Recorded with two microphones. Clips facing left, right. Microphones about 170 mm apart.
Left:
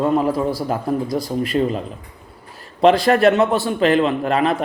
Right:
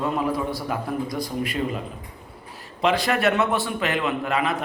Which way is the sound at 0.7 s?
40° left (ahead or behind).